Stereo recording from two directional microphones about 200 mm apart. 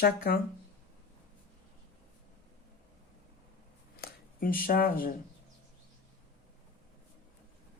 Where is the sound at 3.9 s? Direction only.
45° left (ahead or behind).